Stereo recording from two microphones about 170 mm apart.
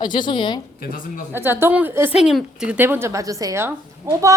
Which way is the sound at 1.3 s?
15° right (ahead or behind).